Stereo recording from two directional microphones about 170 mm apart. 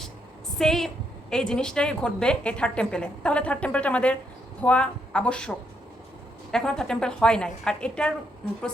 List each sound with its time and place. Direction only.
0.6 s a woman's voice: centre (ahead or behind)